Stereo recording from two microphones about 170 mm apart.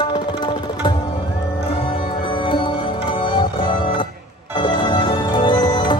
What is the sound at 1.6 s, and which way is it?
Music, 30° left (ahead or behind).